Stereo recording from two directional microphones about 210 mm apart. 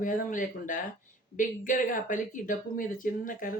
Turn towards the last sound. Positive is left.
turn(degrees=40)  # may be behind; listen again after turning